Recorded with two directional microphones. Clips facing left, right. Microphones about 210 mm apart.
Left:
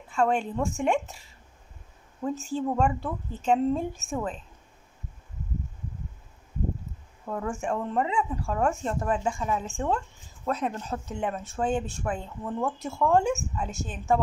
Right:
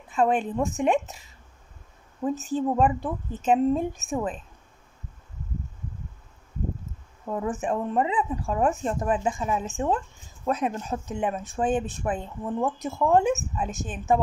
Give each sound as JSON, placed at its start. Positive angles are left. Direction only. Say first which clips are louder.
{"t": 0.1, "sound": "a woman's voice", "louder": "right 2 dB", "side_deg": -20}
{"t": 2.2, "sound": "speech", "louder": "right 3 dB", "side_deg": -20}
{"t": 7.2, "sound": "speech", "louder": "right 3 dB", "side_deg": -20}